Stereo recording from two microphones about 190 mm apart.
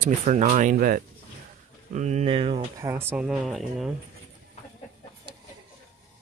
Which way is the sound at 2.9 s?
10° right (ahead or behind).